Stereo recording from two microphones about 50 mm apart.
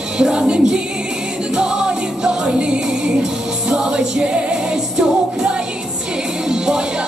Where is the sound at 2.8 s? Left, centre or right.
Centre.